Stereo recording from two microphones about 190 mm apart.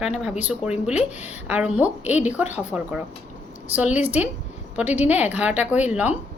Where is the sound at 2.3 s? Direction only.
10° right (ahead or behind).